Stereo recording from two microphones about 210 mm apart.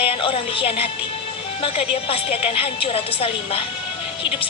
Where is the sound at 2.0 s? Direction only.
25° left (ahead or behind).